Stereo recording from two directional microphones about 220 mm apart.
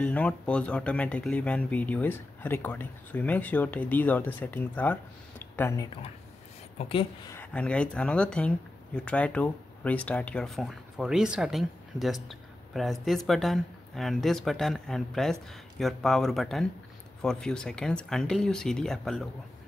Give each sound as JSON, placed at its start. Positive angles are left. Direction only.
{"t": 0.0, "sound": "speech", "side_deg": 5}
{"t": 5.4, "sound": "a sound", "side_deg": 10}
{"t": 6.8, "sound": "a woman's voice", "side_deg": 25}
{"t": 7.3, "sound": "speech", "side_deg": 5}